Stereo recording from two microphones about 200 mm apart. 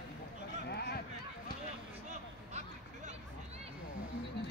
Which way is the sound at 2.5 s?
35° right (ahead or behind).